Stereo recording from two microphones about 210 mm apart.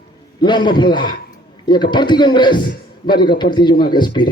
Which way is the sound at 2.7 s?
45° left (ahead or behind).